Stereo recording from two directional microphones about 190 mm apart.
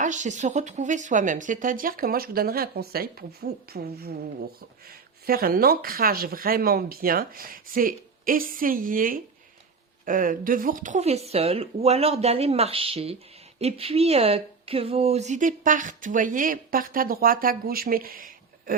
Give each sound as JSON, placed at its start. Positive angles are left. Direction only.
{"t": 0.0, "sound": "a woman's voice", "side_deg": -40}